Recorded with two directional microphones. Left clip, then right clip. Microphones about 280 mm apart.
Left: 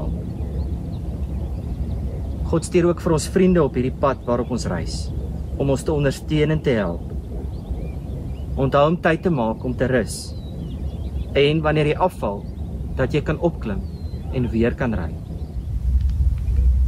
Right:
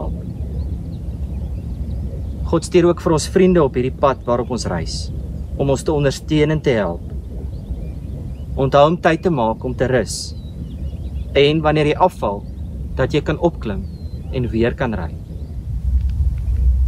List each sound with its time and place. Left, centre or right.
2.5 s speech: right
8.5 s speech: right
11.3 s speech: right